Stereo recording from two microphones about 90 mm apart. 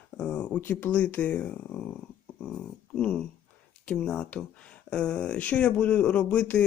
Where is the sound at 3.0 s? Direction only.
10° left (ahead or behind).